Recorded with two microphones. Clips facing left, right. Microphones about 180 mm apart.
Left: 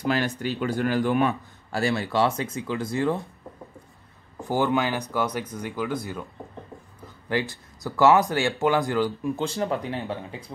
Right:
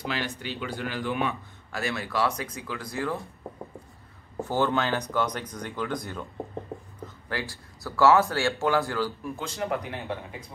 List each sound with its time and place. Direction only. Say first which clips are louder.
0.0 s speech: left 7 dB; 45° left (ahead or behind)
1.7 s speech: left 6 dB; 30° left (ahead or behind)
4.4 s speech: left 2 dB; 15° left (ahead or behind)
7.2 s speech: left 7 dB; 20° left (ahead or behind)
9.4 s speech: left 2 dB; 30° left (ahead or behind)